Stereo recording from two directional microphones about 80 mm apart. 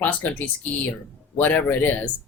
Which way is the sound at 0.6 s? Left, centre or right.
Centre.